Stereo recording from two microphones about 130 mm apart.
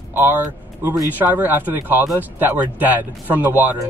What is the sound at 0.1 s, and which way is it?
Speech, 15° right (ahead or behind).